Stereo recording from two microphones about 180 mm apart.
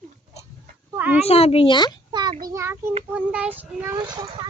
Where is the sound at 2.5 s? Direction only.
15° right (ahead or behind).